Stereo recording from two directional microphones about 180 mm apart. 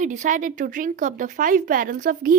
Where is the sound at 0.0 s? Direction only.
45° right (ahead or behind).